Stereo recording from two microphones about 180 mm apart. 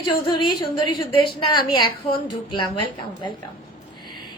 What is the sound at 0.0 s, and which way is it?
A woman's voice, 25° left (ahead or behind).